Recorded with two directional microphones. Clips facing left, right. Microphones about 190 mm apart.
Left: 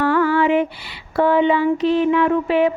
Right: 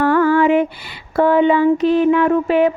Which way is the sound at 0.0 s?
50° right (ahead or behind).